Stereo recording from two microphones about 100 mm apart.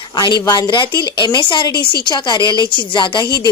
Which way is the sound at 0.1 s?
45° left (ahead or behind).